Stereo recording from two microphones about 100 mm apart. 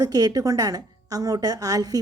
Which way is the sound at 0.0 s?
40° right (ahead or behind).